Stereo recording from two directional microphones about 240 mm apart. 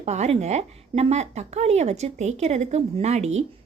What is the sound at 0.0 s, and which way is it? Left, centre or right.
A woman's voice, right.